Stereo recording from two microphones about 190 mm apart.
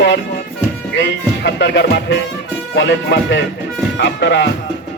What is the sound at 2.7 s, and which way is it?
Speech, 65° left (ahead or behind).